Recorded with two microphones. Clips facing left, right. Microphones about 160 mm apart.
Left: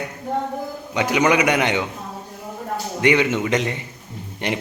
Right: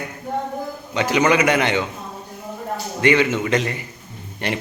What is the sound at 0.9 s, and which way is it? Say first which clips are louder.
Speech: even; 15° left (ahead or behind).